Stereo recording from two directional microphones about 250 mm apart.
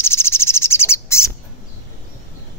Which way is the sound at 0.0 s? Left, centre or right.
Centre.